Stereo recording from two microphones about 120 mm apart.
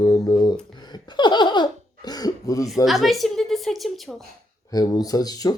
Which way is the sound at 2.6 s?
Centre (ahead or behind).